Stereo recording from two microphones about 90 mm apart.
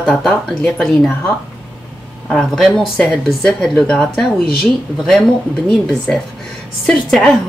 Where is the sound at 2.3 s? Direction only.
5° left (ahead or behind).